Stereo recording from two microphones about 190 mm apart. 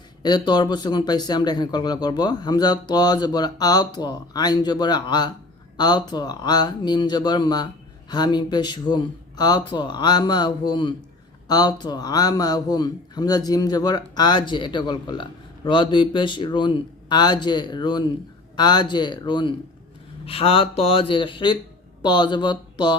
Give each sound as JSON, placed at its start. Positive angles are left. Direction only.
{"t": 0.2, "sound": "a man's voice", "side_deg": 25}